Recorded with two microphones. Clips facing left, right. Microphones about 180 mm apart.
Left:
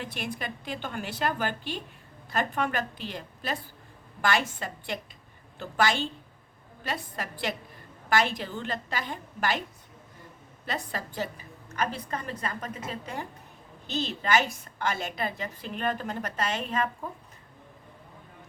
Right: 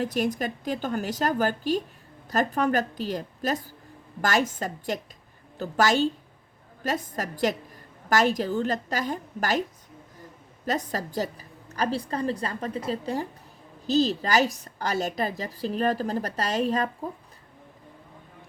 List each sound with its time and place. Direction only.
0.0 s a woman's voice: 40° right (ahead or behind)
10.7 s a woman's voice: 40° right (ahead or behind)